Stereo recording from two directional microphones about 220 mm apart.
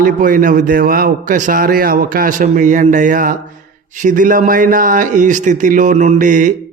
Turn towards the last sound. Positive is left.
turn(degrees=-35)  # may be behind; listen again after turning